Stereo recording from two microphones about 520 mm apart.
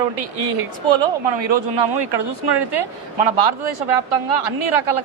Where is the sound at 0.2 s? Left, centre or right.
Right.